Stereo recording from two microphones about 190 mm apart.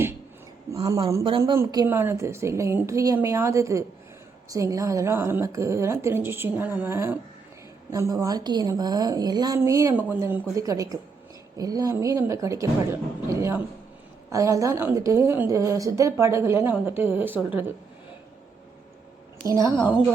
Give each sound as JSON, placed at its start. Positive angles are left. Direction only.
{"t": 0.7, "sound": "a woman's voice", "side_deg": -15}
{"t": 19.5, "sound": "a woman's voice", "side_deg": -15}